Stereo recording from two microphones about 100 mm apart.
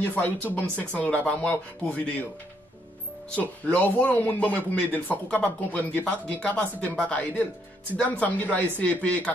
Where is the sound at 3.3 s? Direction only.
15° left (ahead or behind).